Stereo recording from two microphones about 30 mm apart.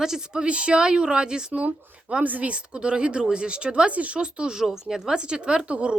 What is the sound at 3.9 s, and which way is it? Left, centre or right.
Speech, right.